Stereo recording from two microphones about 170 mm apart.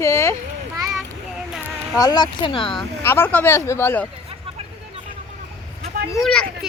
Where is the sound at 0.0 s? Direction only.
15° left (ahead or behind).